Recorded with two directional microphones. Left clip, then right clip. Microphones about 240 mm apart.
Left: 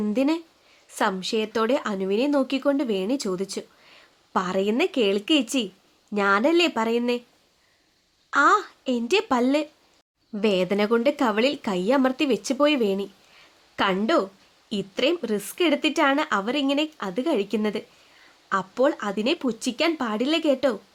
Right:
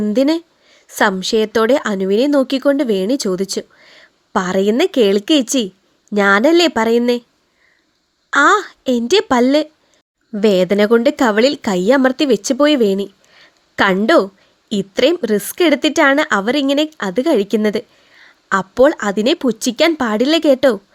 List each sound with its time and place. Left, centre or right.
0.0 s speech: right
8.3 s speech: right